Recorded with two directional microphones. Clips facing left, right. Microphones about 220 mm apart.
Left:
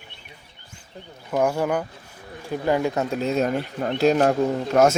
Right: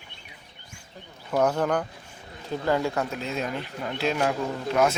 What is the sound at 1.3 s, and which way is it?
Speech, 10° left (ahead or behind).